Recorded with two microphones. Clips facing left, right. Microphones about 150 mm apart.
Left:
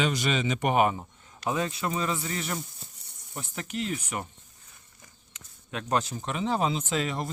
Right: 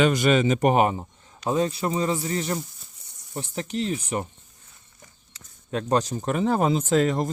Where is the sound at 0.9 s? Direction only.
30° right (ahead or behind).